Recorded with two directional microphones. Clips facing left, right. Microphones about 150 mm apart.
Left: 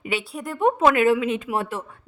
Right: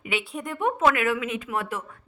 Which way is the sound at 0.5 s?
30° left (ahead or behind).